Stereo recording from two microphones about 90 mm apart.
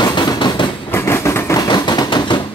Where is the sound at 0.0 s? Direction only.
60° left (ahead or behind).